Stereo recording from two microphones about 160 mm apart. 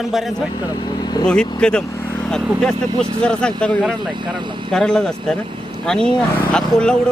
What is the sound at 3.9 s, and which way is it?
Speech, 30° right (ahead or behind).